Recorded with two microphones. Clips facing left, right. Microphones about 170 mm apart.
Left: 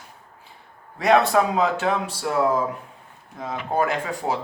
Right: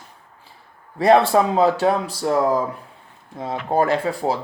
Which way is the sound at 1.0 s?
30° right (ahead or behind).